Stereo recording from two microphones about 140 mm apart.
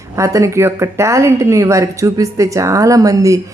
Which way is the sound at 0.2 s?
20° right (ahead or behind).